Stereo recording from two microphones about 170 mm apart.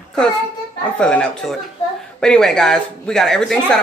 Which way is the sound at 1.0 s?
5° left (ahead or behind).